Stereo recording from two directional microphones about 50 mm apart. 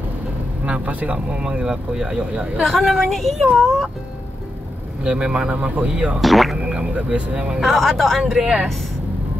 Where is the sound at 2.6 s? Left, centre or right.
Centre.